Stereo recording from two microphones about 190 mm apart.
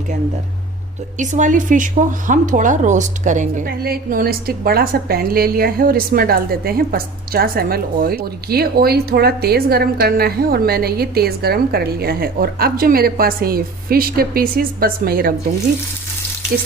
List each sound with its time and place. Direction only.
1.2 s a woman's voice: 40° right (ahead or behind)